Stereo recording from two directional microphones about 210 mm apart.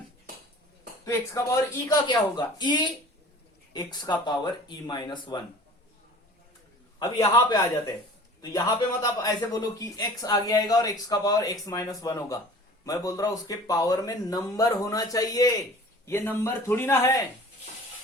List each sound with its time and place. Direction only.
1.0 s speech: 15° left (ahead or behind)
7.0 s speech: 15° left (ahead or behind)